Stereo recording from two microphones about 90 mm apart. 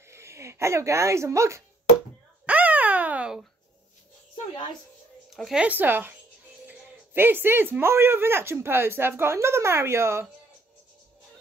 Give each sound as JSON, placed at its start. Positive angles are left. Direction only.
{"t": 0.1, "sound": "speech", "side_deg": -30}
{"t": 2.4, "sound": "a sound", "side_deg": -15}
{"t": 5.3, "sound": "speech", "side_deg": 0}
{"t": 5.6, "sound": "speech", "side_deg": -20}